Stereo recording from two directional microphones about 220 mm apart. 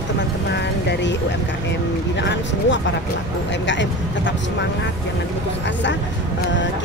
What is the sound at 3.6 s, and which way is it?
Speech, 55° left (ahead or behind).